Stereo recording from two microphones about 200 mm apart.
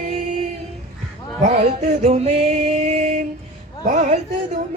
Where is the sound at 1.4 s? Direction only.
30° right (ahead or behind).